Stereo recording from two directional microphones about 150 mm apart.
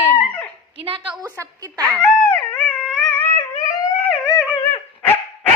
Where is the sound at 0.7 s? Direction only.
40° right (ahead or behind).